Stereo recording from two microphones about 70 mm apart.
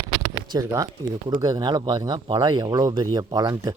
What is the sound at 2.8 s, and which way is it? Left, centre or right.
Speech, right.